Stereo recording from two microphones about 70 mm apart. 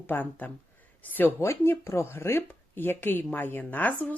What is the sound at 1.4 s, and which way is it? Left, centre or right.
Speech, left.